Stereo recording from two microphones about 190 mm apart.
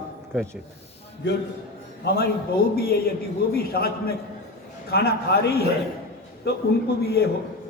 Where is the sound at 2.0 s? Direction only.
55° left (ahead or behind).